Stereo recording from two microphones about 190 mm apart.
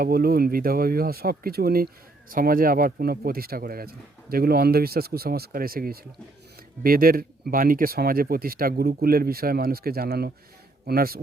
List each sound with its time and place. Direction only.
0.0 s speech: 50° right (ahead or behind)